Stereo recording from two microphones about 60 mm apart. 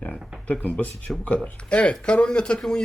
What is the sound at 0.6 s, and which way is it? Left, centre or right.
Speech, left.